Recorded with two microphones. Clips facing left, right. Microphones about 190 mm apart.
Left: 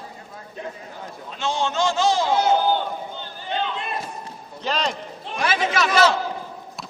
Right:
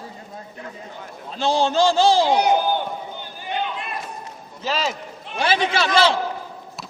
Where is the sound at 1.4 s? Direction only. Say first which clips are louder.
Right 5 dB; 35° right (ahead or behind).